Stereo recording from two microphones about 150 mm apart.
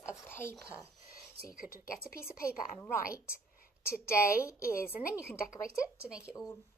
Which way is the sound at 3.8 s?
15° left (ahead or behind).